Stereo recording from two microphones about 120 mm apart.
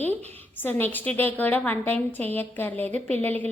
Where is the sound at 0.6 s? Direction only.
15° left (ahead or behind).